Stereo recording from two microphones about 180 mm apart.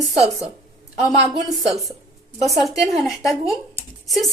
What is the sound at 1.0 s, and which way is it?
Speech, 20° left (ahead or behind).